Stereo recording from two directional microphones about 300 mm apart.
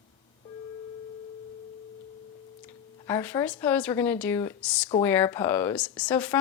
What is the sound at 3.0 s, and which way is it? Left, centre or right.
Speech, centre.